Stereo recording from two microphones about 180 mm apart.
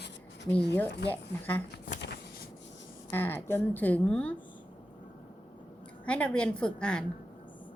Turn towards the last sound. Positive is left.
turn(degrees=5)  # may be behind; listen again after turning